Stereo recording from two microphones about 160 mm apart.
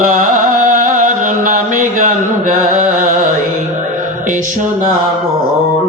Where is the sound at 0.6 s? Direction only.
55° right (ahead or behind).